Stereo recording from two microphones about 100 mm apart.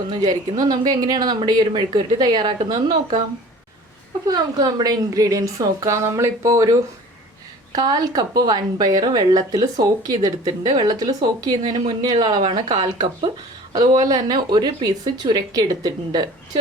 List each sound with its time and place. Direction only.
0.1 s speech: 45° right (ahead or behind)
4.3 s a woman's voice: 40° right (ahead or behind)